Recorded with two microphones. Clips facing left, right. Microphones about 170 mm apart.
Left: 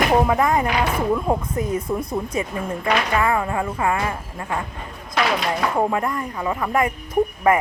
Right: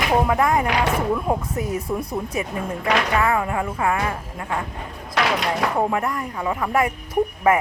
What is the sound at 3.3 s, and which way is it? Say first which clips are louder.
Speech: even; 10° right (ahead or behind).